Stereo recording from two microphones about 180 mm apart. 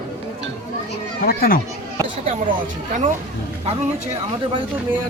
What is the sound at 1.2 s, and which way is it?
Speech, 55° left (ahead or behind).